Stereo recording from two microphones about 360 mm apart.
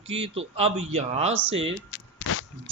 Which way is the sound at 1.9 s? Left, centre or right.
Left.